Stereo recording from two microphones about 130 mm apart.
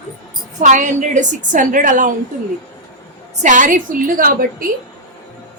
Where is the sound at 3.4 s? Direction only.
80° right.